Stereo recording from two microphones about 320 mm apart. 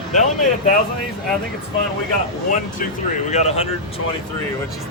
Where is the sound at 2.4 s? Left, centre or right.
Left.